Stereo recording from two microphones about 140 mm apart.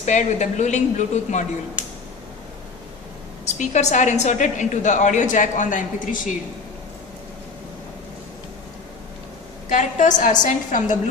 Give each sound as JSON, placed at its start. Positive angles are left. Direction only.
{"t": 0.0, "sound": "a woman's voice", "side_deg": 55}
{"t": 3.4, "sound": "a woman's voice", "side_deg": 55}
{"t": 9.6, "sound": "a woman's voice", "side_deg": 65}